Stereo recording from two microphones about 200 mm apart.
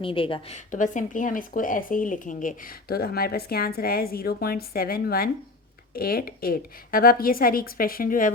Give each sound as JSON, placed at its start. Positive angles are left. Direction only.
{"t": 0.0, "sound": "speech", "side_deg": 25}